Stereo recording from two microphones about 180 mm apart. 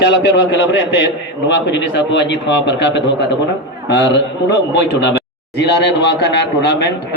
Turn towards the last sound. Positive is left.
turn(degrees=70)  # may be behind; listen again after turning